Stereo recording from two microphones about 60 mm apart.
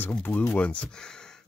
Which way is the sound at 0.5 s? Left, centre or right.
Left.